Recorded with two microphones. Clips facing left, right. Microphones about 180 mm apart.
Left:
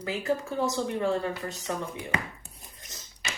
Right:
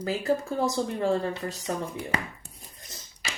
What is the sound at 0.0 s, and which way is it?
A woman's voice, 35° right (ahead or behind).